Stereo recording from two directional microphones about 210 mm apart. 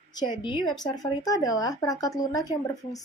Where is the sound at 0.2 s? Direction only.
20° left (ahead or behind).